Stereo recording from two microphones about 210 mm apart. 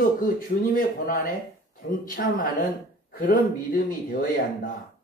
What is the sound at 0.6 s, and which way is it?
A man's voice, 40° left (ahead or behind).